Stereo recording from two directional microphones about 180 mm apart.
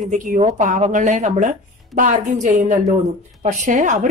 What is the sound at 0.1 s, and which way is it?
A woman's voice, 45° right (ahead or behind).